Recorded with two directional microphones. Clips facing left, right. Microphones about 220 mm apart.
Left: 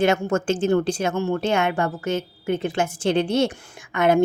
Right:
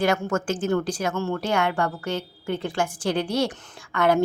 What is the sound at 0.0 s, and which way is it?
A woman's voice, 25° left (ahead or behind).